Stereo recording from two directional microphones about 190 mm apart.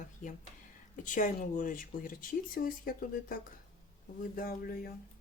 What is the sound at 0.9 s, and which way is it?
Speech, 40° left (ahead or behind).